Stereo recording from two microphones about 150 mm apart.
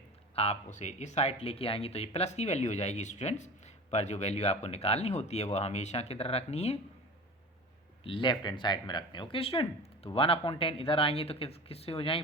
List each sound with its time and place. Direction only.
0.3 s speech: 45° left (ahead or behind)
8.0 s speech: 35° left (ahead or behind)